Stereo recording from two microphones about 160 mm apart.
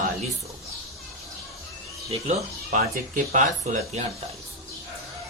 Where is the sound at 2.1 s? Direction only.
40° right (ahead or behind).